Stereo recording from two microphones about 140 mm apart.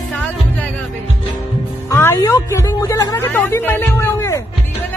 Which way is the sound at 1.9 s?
20° left (ahead or behind).